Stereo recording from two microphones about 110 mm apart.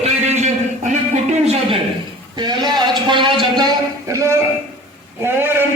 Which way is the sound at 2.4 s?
40° right (ahead or behind).